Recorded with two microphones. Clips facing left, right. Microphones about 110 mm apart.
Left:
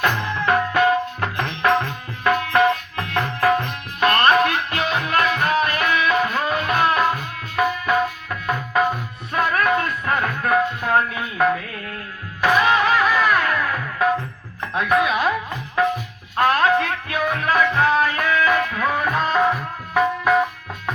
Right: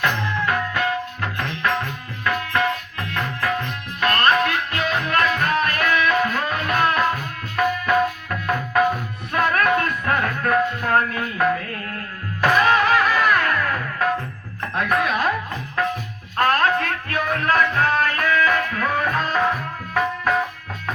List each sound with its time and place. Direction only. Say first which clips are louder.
0.0 s music: left 1 dB; 25° left (ahead or behind)
4.0 s music: left 3 dB; 20° left (ahead or behind)
16.4 s music: left 2 dB; 10° left (ahead or behind)